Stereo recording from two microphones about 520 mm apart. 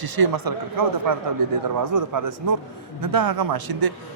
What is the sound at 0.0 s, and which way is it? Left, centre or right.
A man's voice, right.